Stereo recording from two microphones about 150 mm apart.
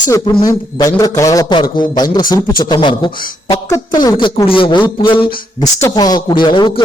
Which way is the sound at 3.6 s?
20° left (ahead or behind).